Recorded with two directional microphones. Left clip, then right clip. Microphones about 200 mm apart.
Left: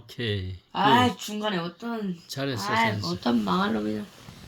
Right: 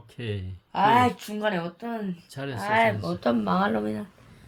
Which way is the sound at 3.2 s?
45° right (ahead or behind).